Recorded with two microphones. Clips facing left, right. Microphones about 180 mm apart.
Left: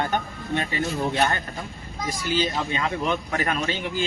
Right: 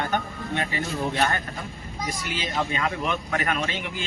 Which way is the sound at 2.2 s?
30° left (ahead or behind).